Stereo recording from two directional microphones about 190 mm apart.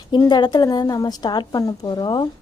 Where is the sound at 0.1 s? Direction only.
20° left (ahead or behind).